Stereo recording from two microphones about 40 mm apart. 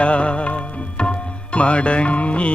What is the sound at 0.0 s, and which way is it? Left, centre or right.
Music, left.